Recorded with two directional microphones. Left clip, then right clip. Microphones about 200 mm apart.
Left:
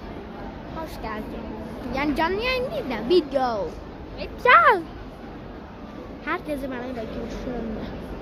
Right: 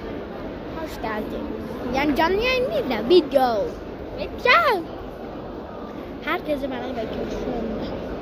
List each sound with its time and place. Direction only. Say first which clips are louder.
1.9 s a child's voice: right 3 dB; 10° left (ahead or behind)
6.2 s speech: right 3 dB; 15° left (ahead or behind)